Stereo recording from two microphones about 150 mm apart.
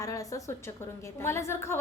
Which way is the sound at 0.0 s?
25° left (ahead or behind).